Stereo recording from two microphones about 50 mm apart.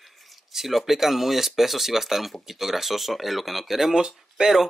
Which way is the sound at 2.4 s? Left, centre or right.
Centre.